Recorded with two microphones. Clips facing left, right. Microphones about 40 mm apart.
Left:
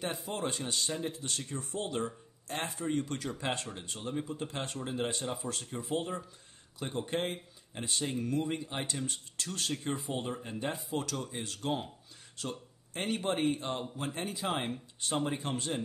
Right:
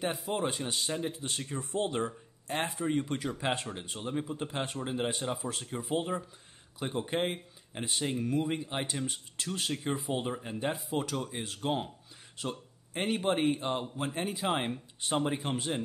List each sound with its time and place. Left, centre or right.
0.0 s speech: centre